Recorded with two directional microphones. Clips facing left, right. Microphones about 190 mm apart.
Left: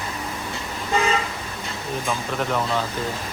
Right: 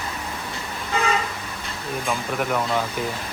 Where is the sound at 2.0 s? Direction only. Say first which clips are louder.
Right 1 dB; 10° right (ahead or behind).